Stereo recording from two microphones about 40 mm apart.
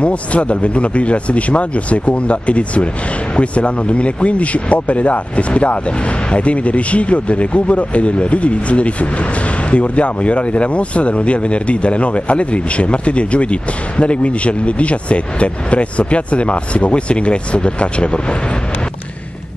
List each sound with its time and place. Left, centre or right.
0.0 s speech: left